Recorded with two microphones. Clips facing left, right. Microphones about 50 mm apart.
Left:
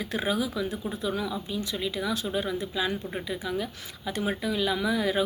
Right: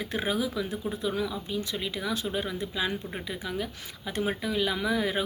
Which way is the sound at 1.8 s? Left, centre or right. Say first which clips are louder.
Left 3 dB; right.